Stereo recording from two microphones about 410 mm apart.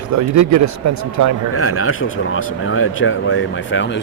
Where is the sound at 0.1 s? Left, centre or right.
Right.